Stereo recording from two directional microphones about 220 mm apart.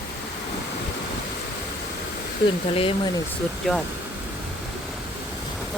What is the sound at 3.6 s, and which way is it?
Speech, centre (ahead or behind).